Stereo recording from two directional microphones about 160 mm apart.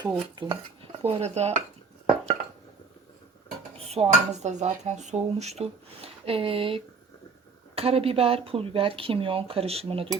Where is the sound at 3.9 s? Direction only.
45° right (ahead or behind).